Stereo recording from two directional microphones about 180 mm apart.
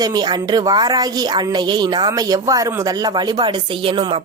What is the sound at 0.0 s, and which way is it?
A woman's voice, 20° right (ahead or behind).